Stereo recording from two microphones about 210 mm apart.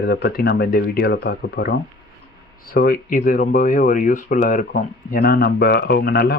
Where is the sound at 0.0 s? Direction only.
50° left (ahead or behind).